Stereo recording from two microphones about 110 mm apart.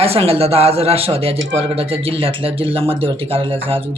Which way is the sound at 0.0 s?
65° right (ahead or behind).